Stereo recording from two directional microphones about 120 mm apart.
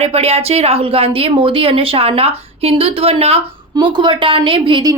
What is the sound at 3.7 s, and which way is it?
A woman's voice, 40° right (ahead or behind).